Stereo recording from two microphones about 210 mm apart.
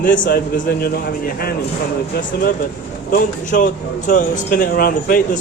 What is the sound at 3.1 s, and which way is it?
A man's voice, 40° left (ahead or behind).